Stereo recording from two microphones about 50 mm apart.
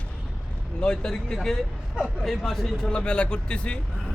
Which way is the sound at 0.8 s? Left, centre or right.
Centre.